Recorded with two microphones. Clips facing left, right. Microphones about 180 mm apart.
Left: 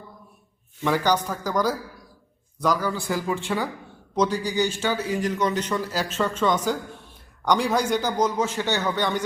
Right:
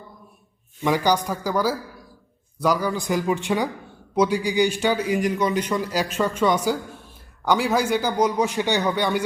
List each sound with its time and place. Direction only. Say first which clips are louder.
0.8 s speech: right 2 dB; 15° right (ahead or behind)